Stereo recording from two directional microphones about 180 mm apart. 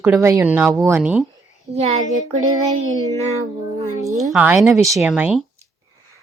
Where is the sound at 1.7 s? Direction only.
35° right (ahead or behind).